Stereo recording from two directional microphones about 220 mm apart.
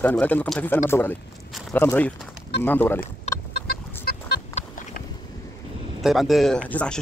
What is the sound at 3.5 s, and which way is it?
Chicken, 45° left (ahead or behind).